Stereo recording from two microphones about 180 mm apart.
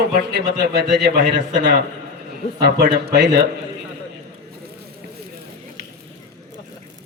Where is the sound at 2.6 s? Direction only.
60° right (ahead or behind).